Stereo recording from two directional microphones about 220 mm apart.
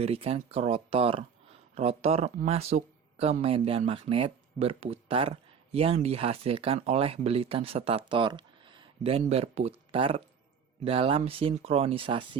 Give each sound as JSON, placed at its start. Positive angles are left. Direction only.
{"t": 0.0, "sound": "speech", "side_deg": -25}